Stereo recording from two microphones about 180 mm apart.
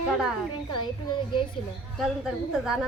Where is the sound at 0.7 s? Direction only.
25° left (ahead or behind).